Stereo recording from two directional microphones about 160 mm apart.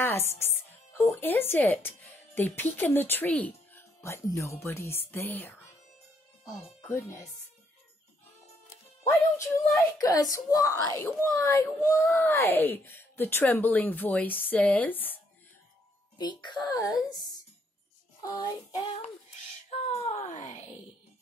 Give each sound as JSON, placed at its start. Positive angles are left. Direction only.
{"t": 0.0, "sound": "speech", "side_deg": 15}
{"t": 6.9, "sound": "speech", "side_deg": 15}
{"t": 9.8, "sound": "speech", "side_deg": 20}
{"t": 16.2, "sound": "a woman's voice", "side_deg": 30}
{"t": 18.2, "sound": "a woman's voice", "side_deg": 25}
{"t": 19.7, "sound": "speech", "side_deg": 45}